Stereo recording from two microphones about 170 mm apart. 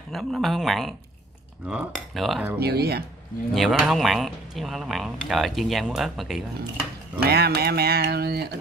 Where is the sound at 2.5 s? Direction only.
70° right (ahead or behind).